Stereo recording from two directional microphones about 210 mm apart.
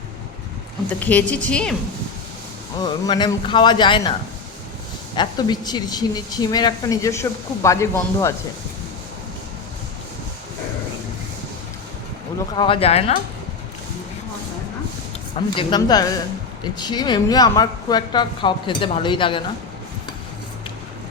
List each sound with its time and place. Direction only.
0.9 s a woman's voice: 5° left (ahead or behind)
2.8 s speech: 20° left (ahead or behind)
5.1 s speech: 20° left (ahead or behind)
12.5 s speech: 25° left (ahead or behind)
15.4 s speech: 20° left (ahead or behind)